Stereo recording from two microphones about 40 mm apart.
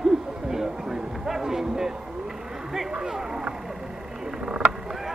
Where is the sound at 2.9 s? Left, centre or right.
Centre.